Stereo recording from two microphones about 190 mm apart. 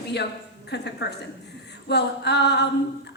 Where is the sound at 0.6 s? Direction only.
60° left (ahead or behind).